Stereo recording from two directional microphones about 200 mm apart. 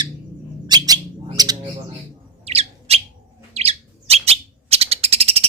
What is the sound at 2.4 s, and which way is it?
Bird, 30° right (ahead or behind).